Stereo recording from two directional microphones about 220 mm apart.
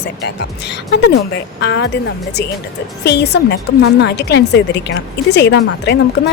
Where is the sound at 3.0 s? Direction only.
50° left (ahead or behind).